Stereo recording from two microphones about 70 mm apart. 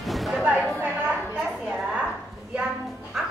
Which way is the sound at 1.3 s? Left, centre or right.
Centre.